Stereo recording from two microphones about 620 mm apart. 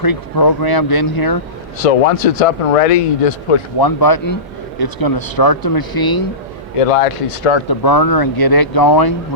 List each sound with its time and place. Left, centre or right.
0.0 s speech: left
1.8 s speech: left
3.8 s speech: left
6.7 s speech: left
7.7 s speech: left